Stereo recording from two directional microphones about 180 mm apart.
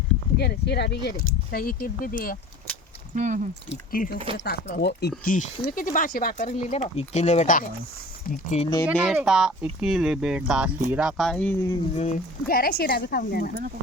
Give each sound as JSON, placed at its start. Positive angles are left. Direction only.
{"t": 0.3, "sound": "speech", "side_deg": 65}
{"t": 3.2, "sound": "speech", "side_deg": -45}
{"t": 3.9, "sound": "speech", "side_deg": 50}
{"t": 5.2, "sound": "speech", "side_deg": 45}
{"t": 8.9, "sound": "speech", "side_deg": -5}
{"t": 11.2, "sound": "speech", "side_deg": 5}
{"t": 11.9, "sound": "speech", "side_deg": 50}